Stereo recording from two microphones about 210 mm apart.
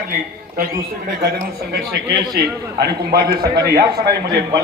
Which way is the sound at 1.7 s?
45° right (ahead or behind).